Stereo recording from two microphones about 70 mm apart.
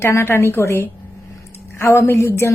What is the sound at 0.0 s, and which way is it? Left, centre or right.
A woman's voice, left.